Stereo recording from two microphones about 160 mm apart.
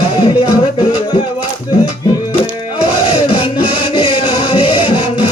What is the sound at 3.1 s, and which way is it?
Music, 35° left (ahead or behind).